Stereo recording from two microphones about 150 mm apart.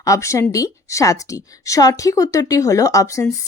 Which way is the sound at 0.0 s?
20° left (ahead or behind).